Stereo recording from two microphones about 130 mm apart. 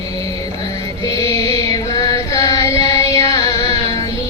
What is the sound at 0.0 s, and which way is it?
Music, 25° left (ahead or behind).